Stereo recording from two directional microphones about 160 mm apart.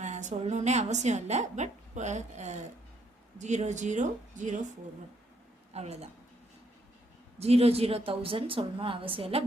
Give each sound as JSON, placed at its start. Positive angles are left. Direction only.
{"t": 0.0, "sound": "a woman's voice", "side_deg": -50}
{"t": 5.7, "sound": "a woman's voice", "side_deg": -40}
{"t": 7.3, "sound": "a woman's voice", "side_deg": -40}